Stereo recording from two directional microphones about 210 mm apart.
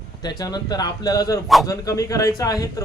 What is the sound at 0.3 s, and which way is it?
A man's voice, 20° left (ahead or behind).